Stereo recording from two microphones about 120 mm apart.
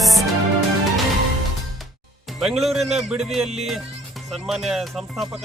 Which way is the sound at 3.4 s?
60° right (ahead or behind).